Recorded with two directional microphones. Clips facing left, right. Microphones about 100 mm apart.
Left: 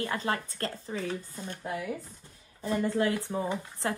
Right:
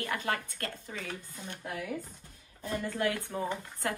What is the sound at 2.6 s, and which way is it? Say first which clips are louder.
A woman's voice: left 5 dB; 25° left (ahead or behind).